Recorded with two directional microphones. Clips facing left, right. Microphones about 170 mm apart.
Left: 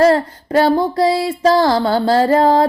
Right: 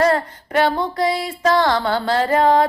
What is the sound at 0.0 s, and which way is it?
Music, 35° left (ahead or behind).